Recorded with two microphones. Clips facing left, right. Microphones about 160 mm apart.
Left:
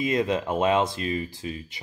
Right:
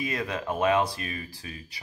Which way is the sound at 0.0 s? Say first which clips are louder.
Left 7 dB; 20° left (ahead or behind).